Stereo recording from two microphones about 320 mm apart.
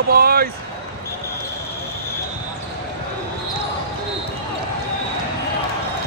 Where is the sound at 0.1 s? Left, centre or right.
Right.